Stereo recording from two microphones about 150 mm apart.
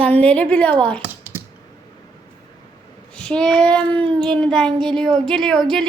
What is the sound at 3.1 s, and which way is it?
Speech, 5° left (ahead or behind).